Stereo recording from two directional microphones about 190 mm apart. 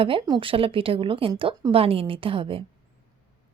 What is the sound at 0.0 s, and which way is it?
A woman's voice, 30° right (ahead or behind).